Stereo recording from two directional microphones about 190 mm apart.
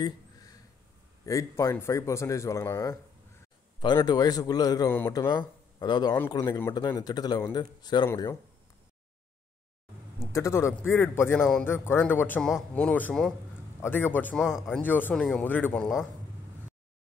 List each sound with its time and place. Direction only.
0.0 s a sound: 20° left (ahead or behind)
1.2 s a man's voice: 15° left (ahead or behind)
5.8 s a man's voice: 20° left (ahead or behind)
10.1 s a man's voice: 15° left (ahead or behind)
14.4 s speech: centre (ahead or behind)
14.8 s a man's voice: 10° left (ahead or behind)